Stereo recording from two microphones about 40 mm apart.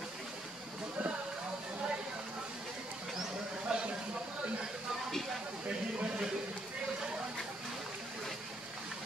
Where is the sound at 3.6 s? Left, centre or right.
Right.